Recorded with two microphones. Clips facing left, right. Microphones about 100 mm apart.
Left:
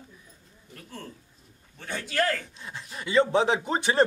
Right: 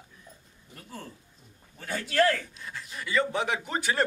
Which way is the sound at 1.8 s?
Centre (ahead or behind).